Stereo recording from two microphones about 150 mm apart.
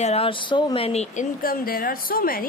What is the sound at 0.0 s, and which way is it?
Speech, 40° left (ahead or behind).